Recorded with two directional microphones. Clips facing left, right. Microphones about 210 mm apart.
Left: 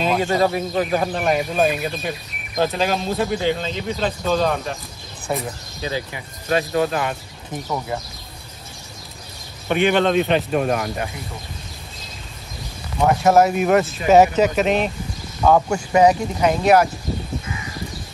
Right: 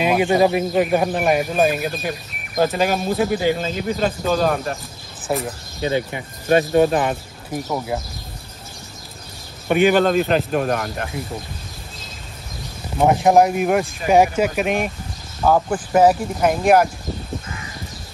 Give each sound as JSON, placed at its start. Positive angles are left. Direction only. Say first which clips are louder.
{"t": 0.0, "sound": "speech", "louder": "right 3 dB", "side_deg": -15}
{"t": 6.5, "sound": "speech", "louder": "right 5 dB", "side_deg": -25}
{"t": 9.7, "sound": "speech", "louder": "right 2 dB", "side_deg": -5}
{"t": 13.0, "sound": "speech", "louder": "right 1 dB", "side_deg": -15}